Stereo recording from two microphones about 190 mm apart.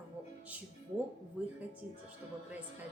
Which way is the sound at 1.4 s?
5° right (ahead or behind).